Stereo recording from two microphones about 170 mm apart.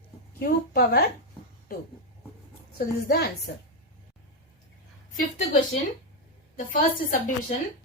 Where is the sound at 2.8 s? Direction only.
65° left (ahead or behind).